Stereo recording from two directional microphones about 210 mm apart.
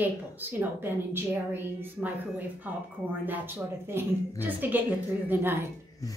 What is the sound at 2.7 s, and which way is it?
A woman's voice, 10° right (ahead or behind).